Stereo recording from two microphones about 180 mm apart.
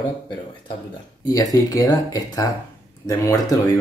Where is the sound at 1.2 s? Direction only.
20° left (ahead or behind).